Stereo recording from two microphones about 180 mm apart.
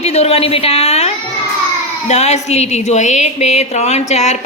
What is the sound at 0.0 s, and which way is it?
A woman's voice, 35° left (ahead or behind).